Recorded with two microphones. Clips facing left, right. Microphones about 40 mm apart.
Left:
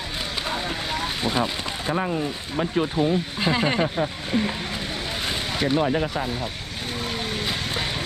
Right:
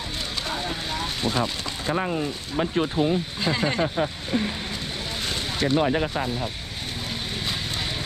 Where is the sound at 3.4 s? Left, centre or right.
Centre.